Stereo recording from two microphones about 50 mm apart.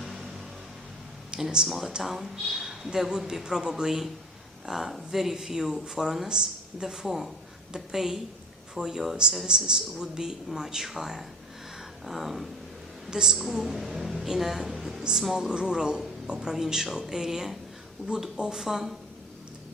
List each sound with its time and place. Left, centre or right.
1.3 s speech: centre
13.1 s a woman's voice: centre
13.3 s speech: centre